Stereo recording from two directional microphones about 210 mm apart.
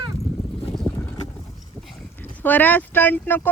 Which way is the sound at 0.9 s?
10° left (ahead or behind).